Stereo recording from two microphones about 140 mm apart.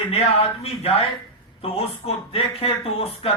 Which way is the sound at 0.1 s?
45° left (ahead or behind).